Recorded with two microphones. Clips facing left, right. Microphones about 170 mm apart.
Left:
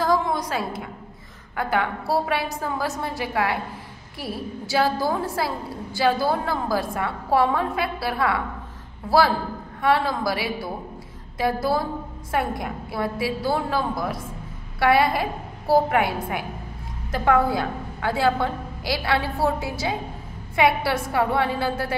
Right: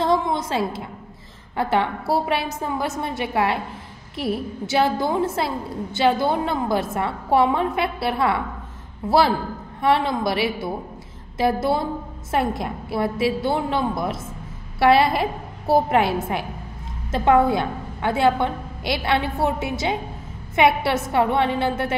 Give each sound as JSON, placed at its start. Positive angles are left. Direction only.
{"t": 0.0, "sound": "a sound", "side_deg": -25}
{"t": 1.6, "sound": "a woman's voice", "side_deg": -25}
{"t": 9.8, "sound": "a woman's voice", "side_deg": -25}